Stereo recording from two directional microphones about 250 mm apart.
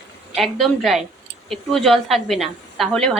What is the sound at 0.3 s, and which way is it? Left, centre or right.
A woman's voice, centre.